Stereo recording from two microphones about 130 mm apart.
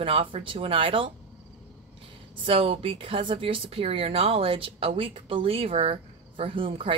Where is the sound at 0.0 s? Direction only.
45° right (ahead or behind).